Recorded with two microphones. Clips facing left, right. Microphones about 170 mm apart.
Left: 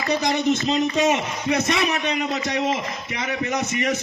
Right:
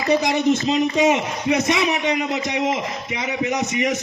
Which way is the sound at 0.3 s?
20° right (ahead or behind).